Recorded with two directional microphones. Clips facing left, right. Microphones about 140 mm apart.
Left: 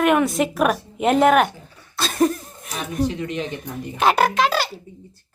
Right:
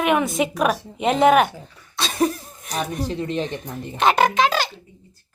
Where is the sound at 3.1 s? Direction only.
35° right (ahead or behind).